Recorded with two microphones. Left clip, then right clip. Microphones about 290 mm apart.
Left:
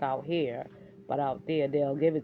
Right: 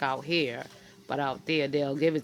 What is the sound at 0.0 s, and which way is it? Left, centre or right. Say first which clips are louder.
Speech: right 2 dB; right.